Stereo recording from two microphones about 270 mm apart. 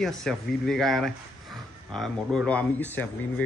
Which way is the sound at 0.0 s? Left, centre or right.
Centre.